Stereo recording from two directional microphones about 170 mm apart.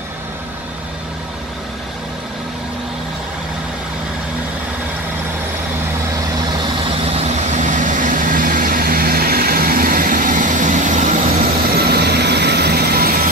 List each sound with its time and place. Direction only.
7.2 s vehicle: 45° right (ahead or behind)
11.7 s vehicle: 70° right (ahead or behind)